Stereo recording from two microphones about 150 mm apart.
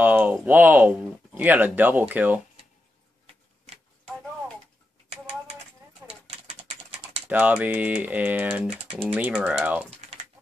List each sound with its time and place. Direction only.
0.0 s speech: 10° right (ahead or behind)
6.7 s typing: 45° right (ahead or behind)
7.2 s speech: 10° right (ahead or behind)